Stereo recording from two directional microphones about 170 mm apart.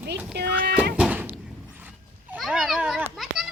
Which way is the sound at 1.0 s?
10° right (ahead or behind).